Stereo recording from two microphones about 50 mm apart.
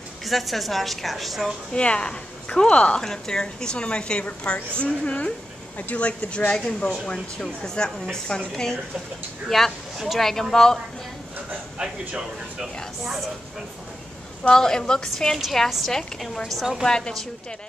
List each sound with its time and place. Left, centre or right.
0.2 s a woman's voice: centre
1.7 s a woman's voice: left
3.0 s a woman's voice: centre
6.6 s a woman's voice: centre
9.5 s a woman's voice: centre
12.1 s speech: centre
14.5 s a woman's voice: centre
15.3 s a woman's voice: centre
15.9 s a woman's voice: centre
16.8 s a woman's voice: centre